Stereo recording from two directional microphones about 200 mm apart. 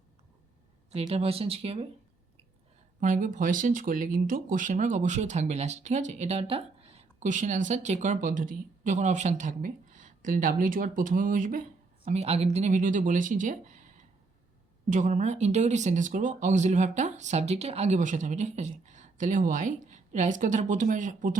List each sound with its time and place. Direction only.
0.9 s speech: 30° right (ahead or behind)
3.0 s speech: 40° right (ahead or behind)
14.8 s speech: 40° right (ahead or behind)